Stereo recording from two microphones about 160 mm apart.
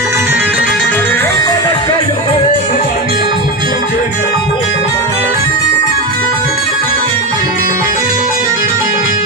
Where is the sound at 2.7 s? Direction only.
70° left (ahead or behind).